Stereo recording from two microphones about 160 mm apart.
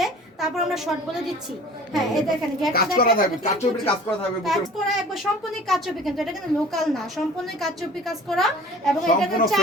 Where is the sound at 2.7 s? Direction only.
60° left (ahead or behind).